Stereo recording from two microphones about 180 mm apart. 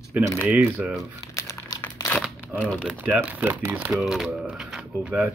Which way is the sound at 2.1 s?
Centre (ahead or behind).